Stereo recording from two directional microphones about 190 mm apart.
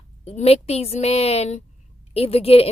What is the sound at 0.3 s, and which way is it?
Speech, 35° left (ahead or behind).